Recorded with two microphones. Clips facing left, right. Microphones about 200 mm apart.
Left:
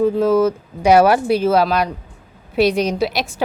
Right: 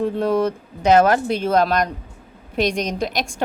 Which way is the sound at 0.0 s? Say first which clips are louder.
Left 5 dB; centre (ahead or behind).